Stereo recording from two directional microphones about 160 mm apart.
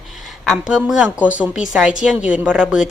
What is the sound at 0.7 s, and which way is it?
Speech, 5° right (ahead or behind).